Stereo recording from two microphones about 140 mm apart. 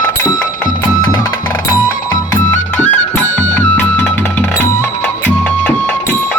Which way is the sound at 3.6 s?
10° left (ahead or behind).